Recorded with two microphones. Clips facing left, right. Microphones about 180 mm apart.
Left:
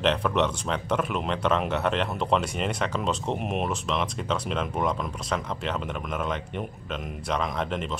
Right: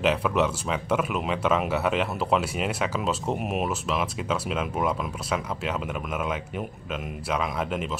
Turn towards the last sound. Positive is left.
turn(degrees=-5)  # may be behind; listen again after turning